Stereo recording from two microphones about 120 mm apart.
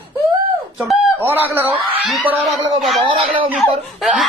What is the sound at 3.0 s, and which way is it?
Speech, 45° right (ahead or behind).